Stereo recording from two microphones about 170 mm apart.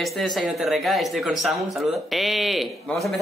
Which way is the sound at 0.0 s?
Centre (ahead or behind).